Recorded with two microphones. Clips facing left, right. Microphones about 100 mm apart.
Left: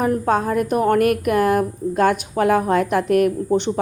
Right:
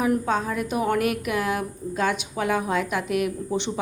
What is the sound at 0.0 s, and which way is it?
A woman's voice, 50° left (ahead or behind).